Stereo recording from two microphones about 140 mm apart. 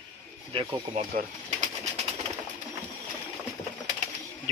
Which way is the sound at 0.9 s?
70° right (ahead or behind).